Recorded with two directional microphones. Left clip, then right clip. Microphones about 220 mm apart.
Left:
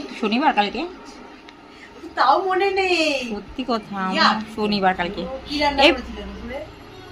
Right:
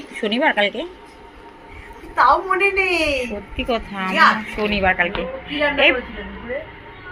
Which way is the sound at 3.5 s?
15° left (ahead or behind).